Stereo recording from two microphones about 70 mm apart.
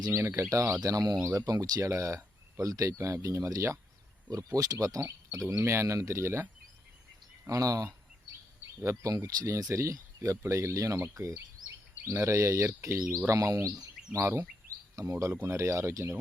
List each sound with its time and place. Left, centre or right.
0.2 s speech: right
0.5 s speech: right
1.2 s speech: right
5.0 s speech: right
7.4 s speech: right
8.8 s speech: right
9.1 s speech: right
14.1 s speech: right
14.9 s speech: right